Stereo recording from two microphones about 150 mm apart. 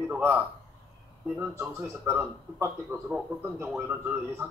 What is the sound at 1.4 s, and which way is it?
A man's voice, 5° right (ahead or behind).